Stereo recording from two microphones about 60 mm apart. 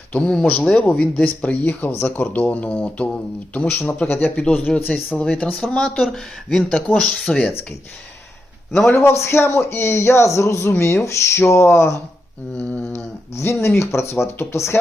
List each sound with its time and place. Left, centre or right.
0.1 s speech: centre
3.8 s speech: left; by 7.4 s centre
8.8 s a man's voice: left
13.4 s a man's voice: left